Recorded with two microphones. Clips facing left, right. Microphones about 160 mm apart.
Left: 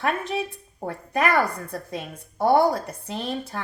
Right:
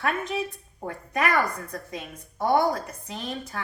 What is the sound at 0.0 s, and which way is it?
A woman's voice, 25° left (ahead or behind).